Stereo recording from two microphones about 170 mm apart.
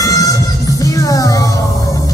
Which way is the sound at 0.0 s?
20° left (ahead or behind).